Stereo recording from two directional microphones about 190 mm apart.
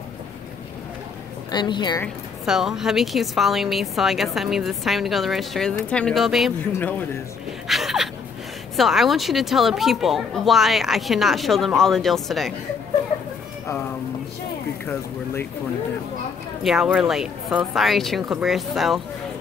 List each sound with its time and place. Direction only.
1.5 s a woman's voice: 25° left (ahead or behind)
2.4 s speech: 5° right (ahead or behind)
7.6 s speech: centre (ahead or behind)
16.6 s speech: 5° right (ahead or behind)